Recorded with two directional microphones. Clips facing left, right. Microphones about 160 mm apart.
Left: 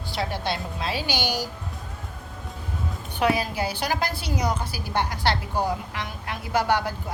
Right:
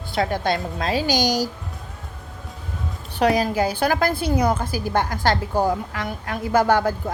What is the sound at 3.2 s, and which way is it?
A woman's voice, 40° right (ahead or behind).